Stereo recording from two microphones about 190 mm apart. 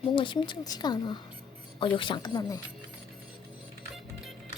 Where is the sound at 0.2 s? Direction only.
25° left (ahead or behind).